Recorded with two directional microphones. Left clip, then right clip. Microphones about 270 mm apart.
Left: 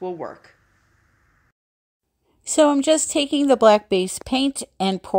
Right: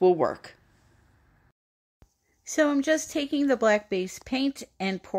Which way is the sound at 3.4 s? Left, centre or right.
Left.